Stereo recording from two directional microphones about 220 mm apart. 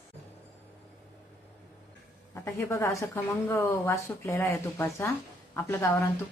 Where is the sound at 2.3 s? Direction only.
15° left (ahead or behind).